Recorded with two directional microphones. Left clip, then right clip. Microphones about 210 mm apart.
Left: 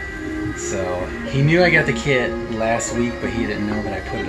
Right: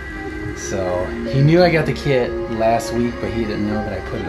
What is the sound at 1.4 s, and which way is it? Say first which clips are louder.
Speech: right 1 dB; 10° right (ahead or behind).